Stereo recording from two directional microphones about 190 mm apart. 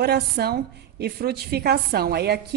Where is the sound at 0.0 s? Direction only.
55° right (ahead or behind).